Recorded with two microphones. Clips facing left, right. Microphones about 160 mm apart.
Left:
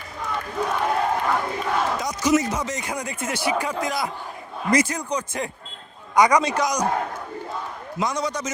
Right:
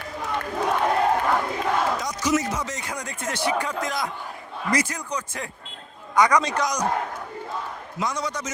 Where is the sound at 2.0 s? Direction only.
15° left (ahead or behind).